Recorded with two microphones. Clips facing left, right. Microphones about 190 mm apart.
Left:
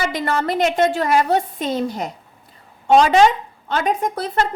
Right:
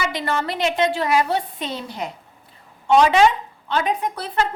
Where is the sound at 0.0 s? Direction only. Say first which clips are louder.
Left 3 dB; 45° left (ahead or behind).